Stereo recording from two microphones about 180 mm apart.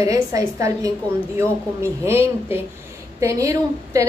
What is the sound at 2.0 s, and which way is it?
A woman's voice, 15° right (ahead or behind).